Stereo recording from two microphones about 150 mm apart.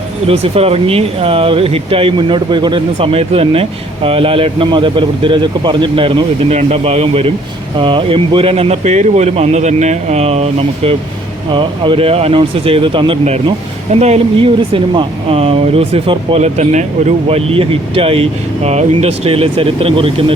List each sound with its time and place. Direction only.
0.3 s speech: 40° right (ahead or behind)